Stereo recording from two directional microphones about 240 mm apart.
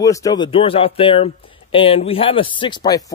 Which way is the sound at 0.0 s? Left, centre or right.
Centre.